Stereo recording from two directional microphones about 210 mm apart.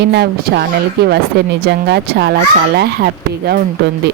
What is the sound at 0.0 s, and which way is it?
Speech, 50° right (ahead or behind).